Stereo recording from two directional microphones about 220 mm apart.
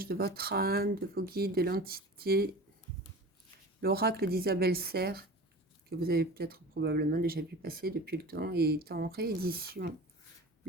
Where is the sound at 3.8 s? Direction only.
45° right (ahead or behind).